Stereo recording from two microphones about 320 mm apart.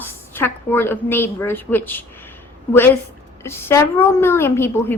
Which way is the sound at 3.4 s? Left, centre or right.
Centre.